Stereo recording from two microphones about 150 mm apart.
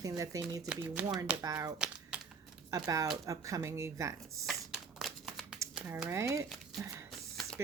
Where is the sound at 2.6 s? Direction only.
25° right (ahead or behind).